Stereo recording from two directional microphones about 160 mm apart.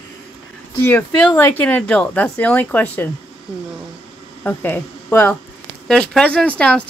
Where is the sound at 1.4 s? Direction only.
10° left (ahead or behind).